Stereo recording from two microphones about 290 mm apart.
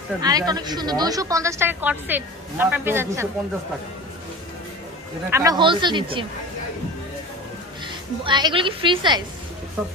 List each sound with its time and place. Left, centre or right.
0.2 s speech: centre
5.3 s speech: centre
7.9 s speech: centre